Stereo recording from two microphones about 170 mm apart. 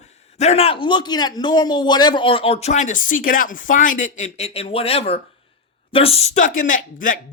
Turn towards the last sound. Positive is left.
turn(degrees=50)  # may be behind; listen again after turning